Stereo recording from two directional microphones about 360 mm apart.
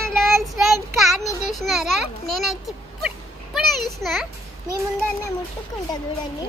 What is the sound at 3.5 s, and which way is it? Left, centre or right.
Speech, centre.